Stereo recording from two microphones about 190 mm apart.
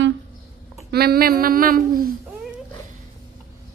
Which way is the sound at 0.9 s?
55° right (ahead or behind).